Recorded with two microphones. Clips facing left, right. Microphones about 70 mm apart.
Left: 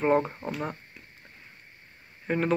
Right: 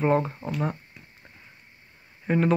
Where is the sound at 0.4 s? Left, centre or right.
Left.